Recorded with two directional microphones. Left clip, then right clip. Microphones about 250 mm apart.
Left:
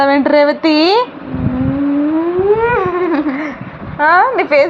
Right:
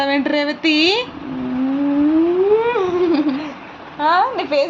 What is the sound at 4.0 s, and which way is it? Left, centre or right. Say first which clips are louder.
Speech: left 6 dB; left.